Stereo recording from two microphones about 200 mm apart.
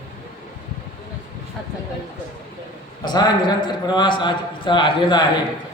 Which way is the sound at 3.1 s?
20° left (ahead or behind).